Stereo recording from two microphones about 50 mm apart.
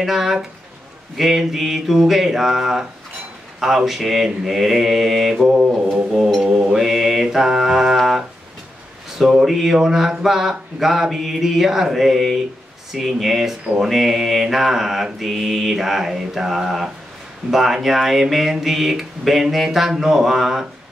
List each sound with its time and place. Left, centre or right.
0.0 s mantra: centre
1.1 s speech: centre
5.5 s mantra: centre
9.2 s mantra: centre
10.2 s speech: centre